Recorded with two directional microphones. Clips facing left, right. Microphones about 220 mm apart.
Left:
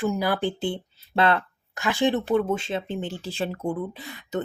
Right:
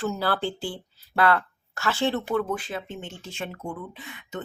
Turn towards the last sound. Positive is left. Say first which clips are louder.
# left 6 dB
turn(degrees=35)  # may be behind; listen again after turning